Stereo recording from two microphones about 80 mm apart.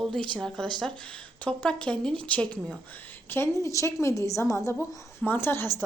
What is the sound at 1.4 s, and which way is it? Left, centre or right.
Speech, centre.